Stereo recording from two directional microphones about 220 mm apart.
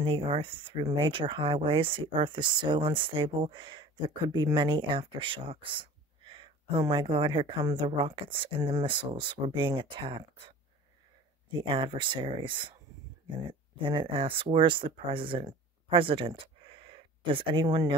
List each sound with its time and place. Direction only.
0.0 s speech: 25° right (ahead or behind)
11.7 s speech: 20° right (ahead or behind)